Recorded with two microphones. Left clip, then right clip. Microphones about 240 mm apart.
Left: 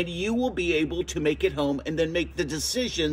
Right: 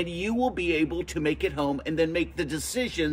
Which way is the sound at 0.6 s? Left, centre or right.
Centre.